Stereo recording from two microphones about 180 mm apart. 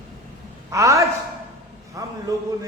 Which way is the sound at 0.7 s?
15° right (ahead or behind).